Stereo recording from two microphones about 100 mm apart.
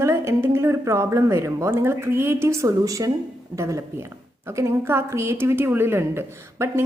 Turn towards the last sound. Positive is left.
turn(degrees=-25)  # may be behind; listen again after turning